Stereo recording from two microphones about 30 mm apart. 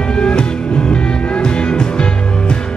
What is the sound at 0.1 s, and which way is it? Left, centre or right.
Music, left.